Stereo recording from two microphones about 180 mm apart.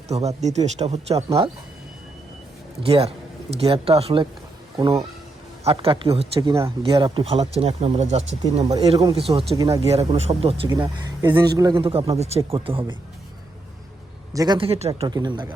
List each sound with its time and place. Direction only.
0.1 s speech: 35° right (ahead or behind)
2.8 s speech: 35° right (ahead or behind)
4.8 s speech: 15° right (ahead or behind)
5.6 s speech: 30° right (ahead or behind)
9.6 s speech: 20° right (ahead or behind)
9.8 s speech: 35° right (ahead or behind)
10.7 s speech: 25° right (ahead or behind)
14.3 s speech: 25° right (ahead or behind)